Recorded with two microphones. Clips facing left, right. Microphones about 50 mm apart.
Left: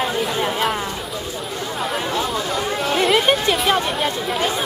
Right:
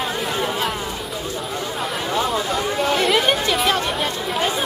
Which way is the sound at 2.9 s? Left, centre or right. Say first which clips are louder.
Left 4 dB; centre.